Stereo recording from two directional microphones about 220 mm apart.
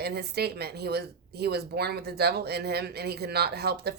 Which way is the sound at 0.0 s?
45° right (ahead or behind).